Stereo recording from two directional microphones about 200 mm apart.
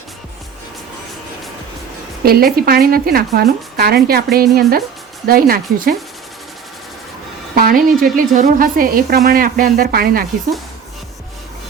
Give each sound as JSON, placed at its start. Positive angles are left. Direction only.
{"t": 2.2, "sound": "speech", "side_deg": -50}
{"t": 7.5, "sound": "speech", "side_deg": -45}